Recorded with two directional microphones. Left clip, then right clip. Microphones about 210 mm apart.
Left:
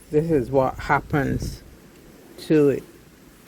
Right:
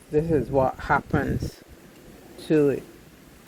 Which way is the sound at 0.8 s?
40° left (ahead or behind).